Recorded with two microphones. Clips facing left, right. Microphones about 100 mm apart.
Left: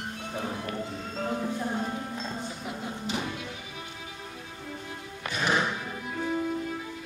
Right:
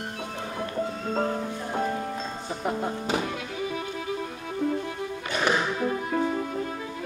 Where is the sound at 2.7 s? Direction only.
45° right (ahead or behind).